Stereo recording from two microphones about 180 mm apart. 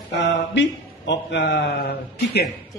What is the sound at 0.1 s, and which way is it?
Speech, 75° left (ahead or behind).